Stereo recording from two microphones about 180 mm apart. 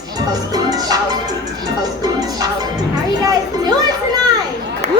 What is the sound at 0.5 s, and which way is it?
Music, 20° right (ahead or behind).